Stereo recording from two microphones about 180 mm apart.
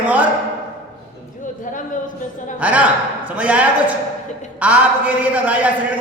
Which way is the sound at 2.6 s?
5° right (ahead or behind).